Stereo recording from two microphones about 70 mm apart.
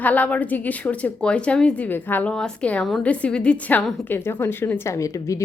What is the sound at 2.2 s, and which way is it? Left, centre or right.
A woman's voice, centre.